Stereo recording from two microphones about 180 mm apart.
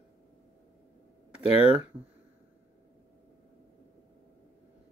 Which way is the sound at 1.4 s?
35° left (ahead or behind).